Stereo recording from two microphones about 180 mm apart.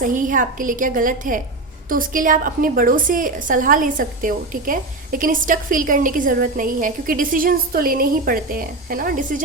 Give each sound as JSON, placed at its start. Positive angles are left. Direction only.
{"t": 0.0, "sound": "a woman's voice", "side_deg": -45}